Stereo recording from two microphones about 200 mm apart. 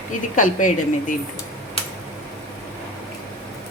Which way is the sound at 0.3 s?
40° left (ahead or behind).